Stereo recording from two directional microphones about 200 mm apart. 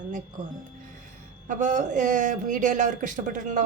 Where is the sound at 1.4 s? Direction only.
40° right (ahead or behind).